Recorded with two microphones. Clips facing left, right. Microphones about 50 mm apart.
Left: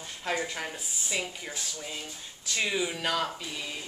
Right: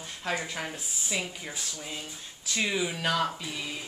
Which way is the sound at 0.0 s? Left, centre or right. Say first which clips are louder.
Left 1 dB; centre.